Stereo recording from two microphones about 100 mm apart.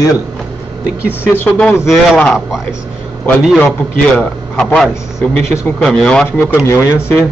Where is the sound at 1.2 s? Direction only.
20° left (ahead or behind).